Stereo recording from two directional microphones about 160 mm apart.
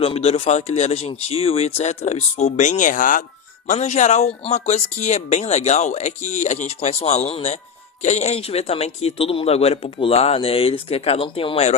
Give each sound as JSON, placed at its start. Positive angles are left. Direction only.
{"t": 0.0, "sound": "speech", "side_deg": 40}
{"t": 3.7, "sound": "speech", "side_deg": 45}